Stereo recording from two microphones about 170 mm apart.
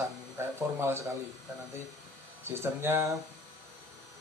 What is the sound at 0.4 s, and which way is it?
Speech, 15° right (ahead or behind).